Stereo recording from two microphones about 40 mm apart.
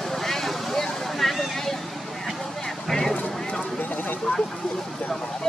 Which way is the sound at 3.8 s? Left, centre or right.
Left.